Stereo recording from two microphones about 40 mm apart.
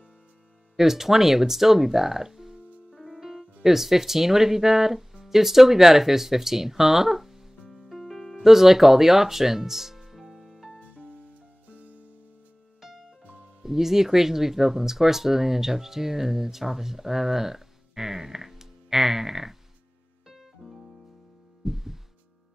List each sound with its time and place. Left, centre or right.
0.7 s speech: centre
2.9 s music: centre
3.2 s speech: centre
7.7 s music: centre
8.5 s speech: centre
10.9 s music: right
12.8 s music: centre
13.6 s speech: centre
20.2 s music: centre